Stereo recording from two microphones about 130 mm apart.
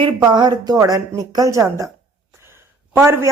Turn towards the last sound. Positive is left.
turn(degrees=-20)  # may be behind; listen again after turning